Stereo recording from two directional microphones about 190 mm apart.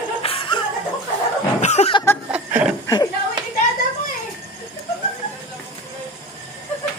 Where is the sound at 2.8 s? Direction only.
20° left (ahead or behind).